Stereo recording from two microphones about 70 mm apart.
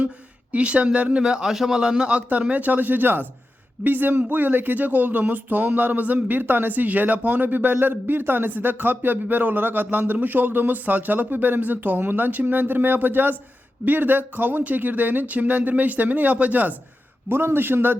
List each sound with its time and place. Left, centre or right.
0.5 s a man's voice: centre